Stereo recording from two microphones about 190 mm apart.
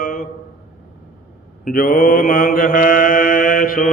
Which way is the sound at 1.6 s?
50° left (ahead or behind).